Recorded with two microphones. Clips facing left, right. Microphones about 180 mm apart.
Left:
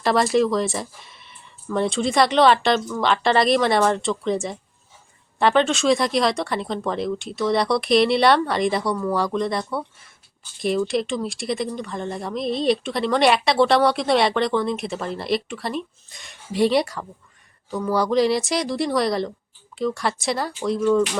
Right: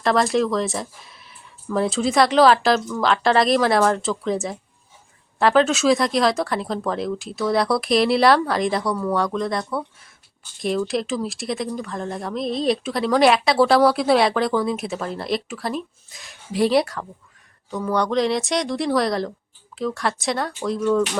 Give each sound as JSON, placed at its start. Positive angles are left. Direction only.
{"t": 0.0, "sound": "speech", "side_deg": 0}